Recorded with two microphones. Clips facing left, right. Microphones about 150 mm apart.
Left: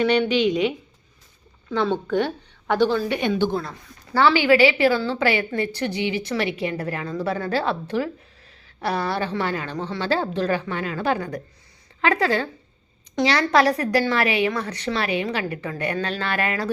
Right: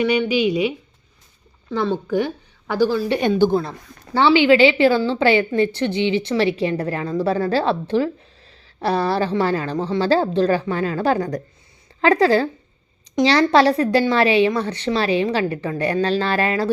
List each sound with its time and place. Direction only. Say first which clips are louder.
0.0 s speech: right 1 dB; 10° right (ahead or behind)
1.7 s speech: right 1 dB; 10° right (ahead or behind)
3.2 s a woman's voice: right 5 dB; 40° right (ahead or behind)